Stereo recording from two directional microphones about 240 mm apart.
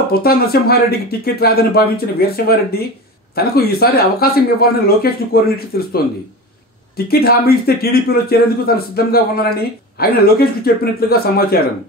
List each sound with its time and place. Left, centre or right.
0.1 s speech: left
7.1 s speech: left